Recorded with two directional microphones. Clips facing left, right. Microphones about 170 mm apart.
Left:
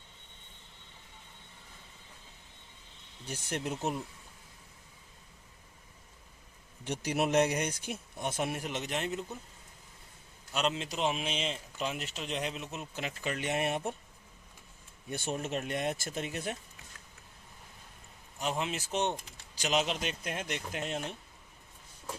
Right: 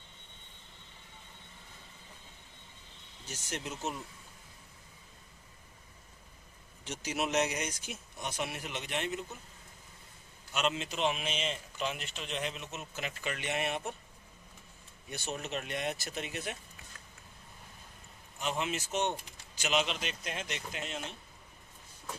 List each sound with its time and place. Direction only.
3.2 s a man's voice: 55° left (ahead or behind)
6.8 s a man's voice: 60° left (ahead or behind); by 9.2 s 35° left (ahead or behind)
10.5 s speech: 35° left (ahead or behind)
11.2 s a man's voice: 5° right (ahead or behind)
13.0 s speech: 35° left (ahead or behind)
15.1 s speech: 50° left (ahead or behind)
18.4 s speech: 35° left (ahead or behind)
18.9 s a man's voice: 5° right (ahead or behind)
19.6 s speech: 40° left (ahead or behind)